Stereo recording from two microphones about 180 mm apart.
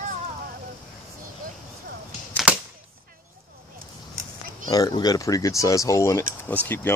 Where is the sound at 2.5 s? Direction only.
10° right (ahead or behind).